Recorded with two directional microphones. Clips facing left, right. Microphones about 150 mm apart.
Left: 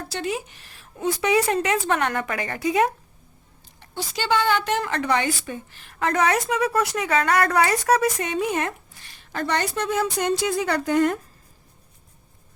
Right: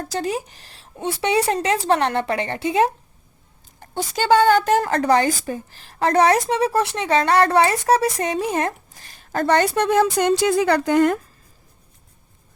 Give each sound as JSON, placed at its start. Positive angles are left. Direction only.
{"t": 0.0, "sound": "a woman's voice", "side_deg": -40}
{"t": 3.8, "sound": "a woman's voice", "side_deg": -45}